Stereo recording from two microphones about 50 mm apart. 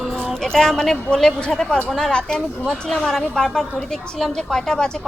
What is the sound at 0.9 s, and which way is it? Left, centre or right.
Speech, left.